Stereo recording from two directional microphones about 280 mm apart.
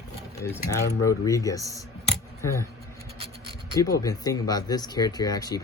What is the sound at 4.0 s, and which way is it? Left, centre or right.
Speech, centre.